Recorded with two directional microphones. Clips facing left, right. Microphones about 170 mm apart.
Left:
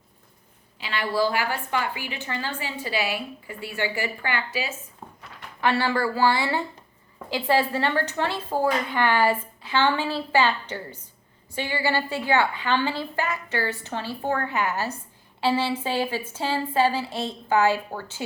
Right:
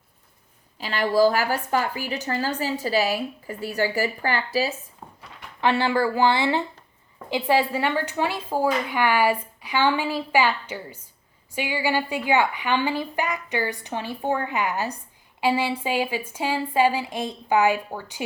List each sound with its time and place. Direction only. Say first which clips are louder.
0.8 s a woman's voice: right 5 dB; 40° right (ahead or behind)
5.5 s a woman's voice: right 2 dB; 20° right (ahead or behind)